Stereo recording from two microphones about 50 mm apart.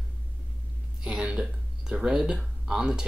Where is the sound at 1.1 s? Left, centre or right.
Centre.